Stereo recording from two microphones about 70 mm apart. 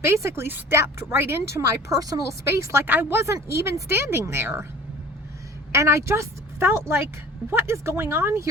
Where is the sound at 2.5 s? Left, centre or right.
Right.